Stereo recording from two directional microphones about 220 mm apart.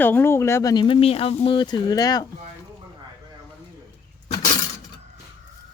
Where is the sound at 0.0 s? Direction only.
10° left (ahead or behind).